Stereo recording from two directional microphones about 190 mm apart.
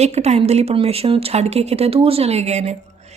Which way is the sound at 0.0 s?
35° right (ahead or behind).